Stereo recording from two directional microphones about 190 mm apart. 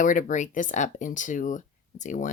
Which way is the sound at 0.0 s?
45° left (ahead or behind).